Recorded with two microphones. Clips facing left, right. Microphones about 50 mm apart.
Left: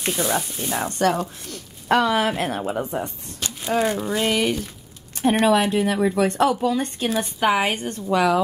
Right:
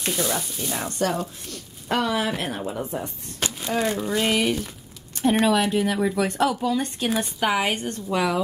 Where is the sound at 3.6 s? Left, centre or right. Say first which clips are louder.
Left 4 dB; centre.